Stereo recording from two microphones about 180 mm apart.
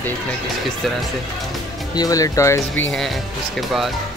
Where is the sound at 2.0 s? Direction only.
20° left (ahead or behind).